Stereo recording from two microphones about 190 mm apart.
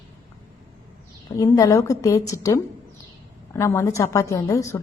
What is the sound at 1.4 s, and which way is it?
A woman's voice, 15° left (ahead or behind).